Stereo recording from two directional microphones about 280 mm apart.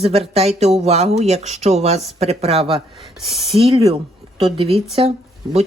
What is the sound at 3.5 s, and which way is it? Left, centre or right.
Speech, centre.